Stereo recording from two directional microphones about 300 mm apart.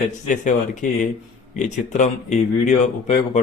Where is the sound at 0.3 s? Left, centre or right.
Left.